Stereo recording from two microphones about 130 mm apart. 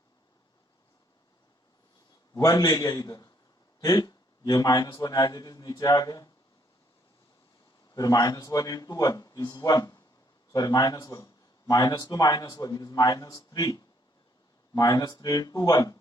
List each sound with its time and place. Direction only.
2.3 s speech: 30° left (ahead or behind)
7.9 s speech: 30° left (ahead or behind)